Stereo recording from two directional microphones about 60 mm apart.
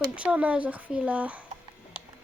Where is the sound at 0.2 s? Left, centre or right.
Right.